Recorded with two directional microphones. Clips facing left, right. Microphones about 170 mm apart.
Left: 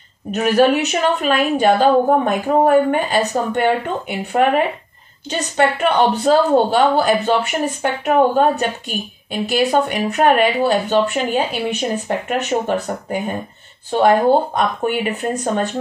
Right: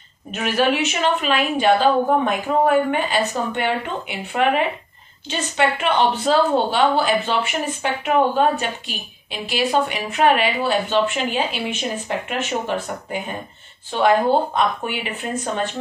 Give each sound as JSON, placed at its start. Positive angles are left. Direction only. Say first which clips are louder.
{"t": 0.3, "sound": "a woman's voice", "louder": "left 6 dB", "side_deg": 40}